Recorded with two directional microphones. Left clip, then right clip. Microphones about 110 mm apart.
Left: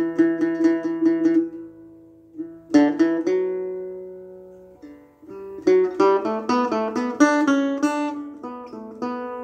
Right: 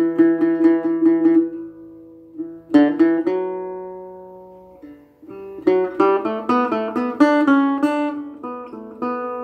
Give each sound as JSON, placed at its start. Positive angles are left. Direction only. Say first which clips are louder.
{"t": 0.0, "sound": "music", "louder": "right 4 dB", "side_deg": 30}
{"t": 2.7, "sound": "music", "louder": "right 3 dB", "side_deg": 30}
{"t": 5.3, "sound": "music", "louder": "even", "side_deg": 35}